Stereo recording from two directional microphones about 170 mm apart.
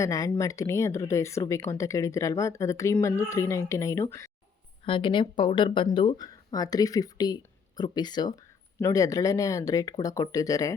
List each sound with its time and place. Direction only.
0.0 s speech: 20° left (ahead or behind)
4.9 s speech: 30° left (ahead or behind)